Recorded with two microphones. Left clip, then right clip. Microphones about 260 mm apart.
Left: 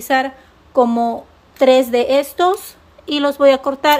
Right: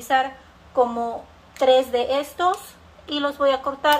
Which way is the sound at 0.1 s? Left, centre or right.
Left.